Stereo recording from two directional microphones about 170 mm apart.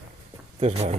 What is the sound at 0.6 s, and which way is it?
Speech, 40° right (ahead or behind).